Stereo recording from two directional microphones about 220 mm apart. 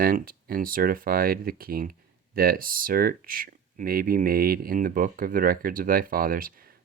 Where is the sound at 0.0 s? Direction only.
40° right (ahead or behind).